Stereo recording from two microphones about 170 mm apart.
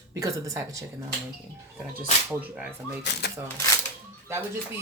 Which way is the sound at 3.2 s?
70° left (ahead or behind).